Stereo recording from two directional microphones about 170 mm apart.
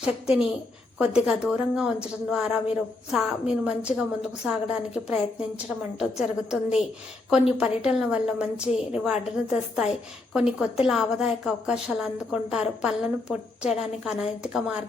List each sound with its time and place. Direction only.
0.0 s a woman's voice: 5° right (ahead or behind)